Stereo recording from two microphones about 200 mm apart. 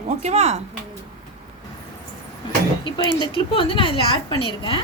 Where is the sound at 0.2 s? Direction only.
35° right (ahead or behind).